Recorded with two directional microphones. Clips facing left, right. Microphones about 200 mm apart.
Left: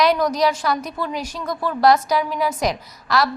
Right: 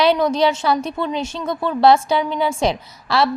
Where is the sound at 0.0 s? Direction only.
30° right (ahead or behind).